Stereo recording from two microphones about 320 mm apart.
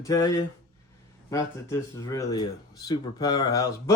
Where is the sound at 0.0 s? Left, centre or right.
Centre.